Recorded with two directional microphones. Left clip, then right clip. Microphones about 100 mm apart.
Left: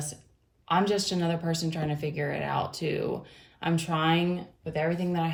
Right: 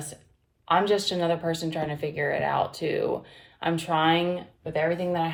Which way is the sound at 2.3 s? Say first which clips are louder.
Right 6 dB; 35° right (ahead or behind).